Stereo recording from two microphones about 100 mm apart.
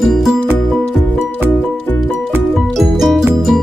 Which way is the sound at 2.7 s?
Centre (ahead or behind).